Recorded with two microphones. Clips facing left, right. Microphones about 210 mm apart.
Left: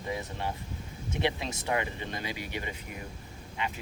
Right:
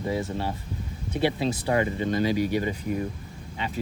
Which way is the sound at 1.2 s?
35° right (ahead or behind).